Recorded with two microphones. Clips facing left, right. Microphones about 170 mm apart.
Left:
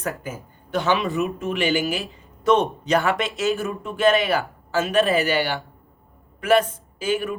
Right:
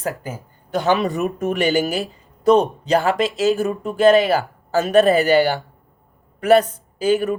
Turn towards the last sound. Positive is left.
turn(degrees=-40)  # may be behind; listen again after turning